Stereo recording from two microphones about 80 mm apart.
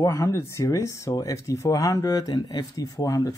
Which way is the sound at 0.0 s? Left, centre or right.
Left.